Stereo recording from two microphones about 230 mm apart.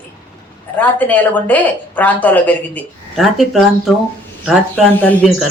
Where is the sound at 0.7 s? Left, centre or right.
Centre.